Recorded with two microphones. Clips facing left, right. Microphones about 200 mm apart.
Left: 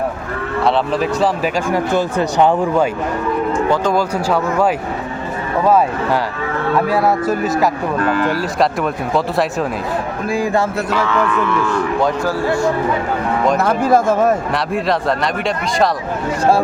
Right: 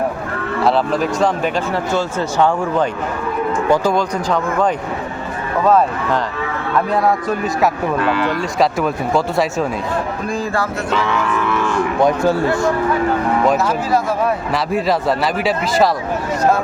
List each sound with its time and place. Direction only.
0.6 s speech: centre (ahead or behind)
1.7 s speech: 15° left (ahead or behind)
3.9 s speech: 5° left (ahead or behind)
6.9 s speech: 5° left (ahead or behind)
7.9 s speech: 45° left (ahead or behind)
8.3 s speech: centre (ahead or behind)
12.0 s speech: 25° right (ahead or behind)
13.6 s speech: 55° left (ahead or behind)
14.5 s speech: centre (ahead or behind)